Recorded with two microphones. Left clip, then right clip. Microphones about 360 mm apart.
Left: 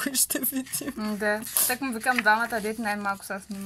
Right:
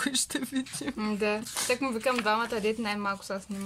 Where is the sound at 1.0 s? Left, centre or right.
Right.